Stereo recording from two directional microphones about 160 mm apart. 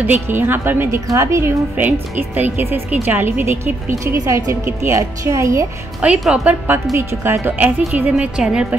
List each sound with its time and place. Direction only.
0.0 s a woman's voice: 10° right (ahead or behind)
5.9 s a woman's voice: 5° right (ahead or behind)